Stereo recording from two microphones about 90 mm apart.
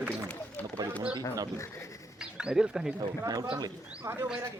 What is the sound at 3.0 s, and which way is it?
Speech, 50° right (ahead or behind).